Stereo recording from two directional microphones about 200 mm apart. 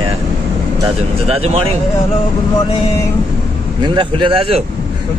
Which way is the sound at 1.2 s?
30° right (ahead or behind).